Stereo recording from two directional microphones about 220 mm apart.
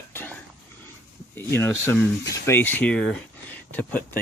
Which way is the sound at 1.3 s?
10° left (ahead or behind).